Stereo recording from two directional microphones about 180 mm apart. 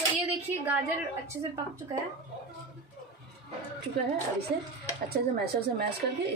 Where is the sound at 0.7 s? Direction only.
15° right (ahead or behind).